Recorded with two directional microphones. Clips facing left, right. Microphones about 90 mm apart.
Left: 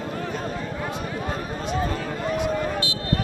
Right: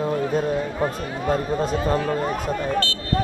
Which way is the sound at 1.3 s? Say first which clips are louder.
Right 10 dB; 40° right (ahead or behind).